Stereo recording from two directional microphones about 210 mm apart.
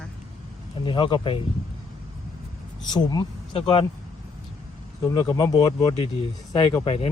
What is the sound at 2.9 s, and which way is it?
Speech, 20° left (ahead or behind).